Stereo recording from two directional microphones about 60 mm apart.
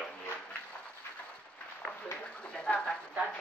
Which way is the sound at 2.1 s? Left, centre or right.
Left.